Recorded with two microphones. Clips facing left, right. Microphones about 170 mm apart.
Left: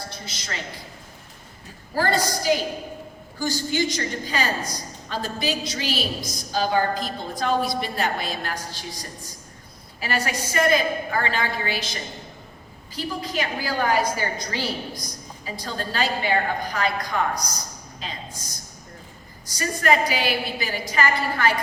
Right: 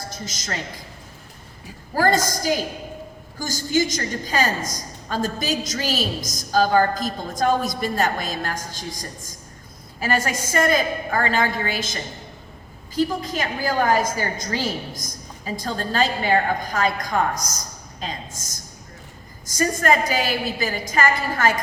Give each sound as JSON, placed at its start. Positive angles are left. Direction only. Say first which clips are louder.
{"t": 0.1, "sound": "a man's voice", "louder": "right 4 dB", "side_deg": -40}
{"t": 2.0, "sound": "a woman's voice", "louder": "right 3 dB", "side_deg": -45}
{"t": 10.0, "sound": "a woman's voice", "louder": "right 3 dB", "side_deg": -45}
{"t": 19.5, "sound": "a woman's voice", "louder": "right 2 dB", "side_deg": -45}